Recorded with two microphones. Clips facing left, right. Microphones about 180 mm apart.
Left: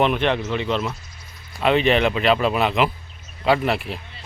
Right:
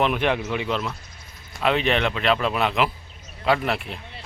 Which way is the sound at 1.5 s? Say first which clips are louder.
Left 4 dB; centre (ahead or behind).